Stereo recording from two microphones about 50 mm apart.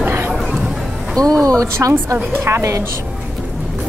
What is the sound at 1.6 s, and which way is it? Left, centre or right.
A woman's voice, right.